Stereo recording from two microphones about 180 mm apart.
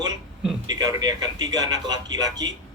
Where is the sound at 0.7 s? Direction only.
20° right (ahead or behind).